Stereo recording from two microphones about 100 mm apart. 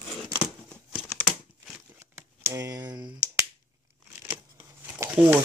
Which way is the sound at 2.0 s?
25° right (ahead or behind).